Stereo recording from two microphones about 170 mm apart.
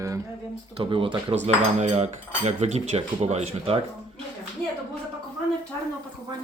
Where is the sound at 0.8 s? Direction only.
30° right (ahead or behind).